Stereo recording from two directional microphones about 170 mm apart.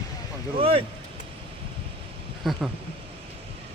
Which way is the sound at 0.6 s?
35° right (ahead or behind).